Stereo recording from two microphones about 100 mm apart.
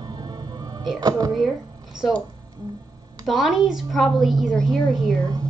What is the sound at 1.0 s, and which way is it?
Speech, 40° right (ahead or behind).